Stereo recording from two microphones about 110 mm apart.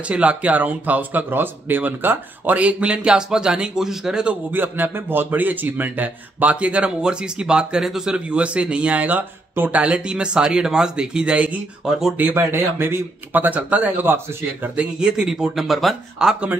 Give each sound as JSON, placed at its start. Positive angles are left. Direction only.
{"t": 0.1, "sound": "speech", "side_deg": -10}
{"t": 12.2, "sound": "speech", "side_deg": -20}
{"t": 15.0, "sound": "speech", "side_deg": -5}